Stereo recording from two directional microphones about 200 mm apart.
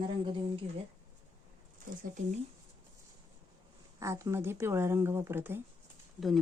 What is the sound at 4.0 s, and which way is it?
Speech, 15° right (ahead or behind).